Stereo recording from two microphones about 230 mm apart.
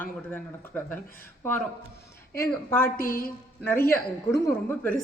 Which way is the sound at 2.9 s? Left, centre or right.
Left.